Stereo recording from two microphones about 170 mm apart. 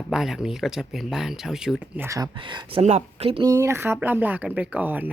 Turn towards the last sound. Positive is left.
turn(degrees=-10)  # may be behind; listen again after turning